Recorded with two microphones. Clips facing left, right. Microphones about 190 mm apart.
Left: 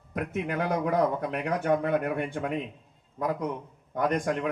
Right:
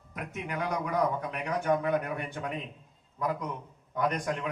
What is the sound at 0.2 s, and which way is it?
Speech, 55° left (ahead or behind).